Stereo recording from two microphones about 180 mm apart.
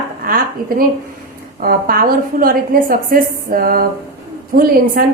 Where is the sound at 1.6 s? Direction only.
55° right (ahead or behind).